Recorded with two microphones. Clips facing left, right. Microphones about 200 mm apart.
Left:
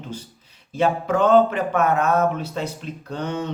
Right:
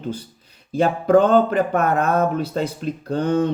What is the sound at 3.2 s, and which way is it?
Speech, 55° right (ahead or behind).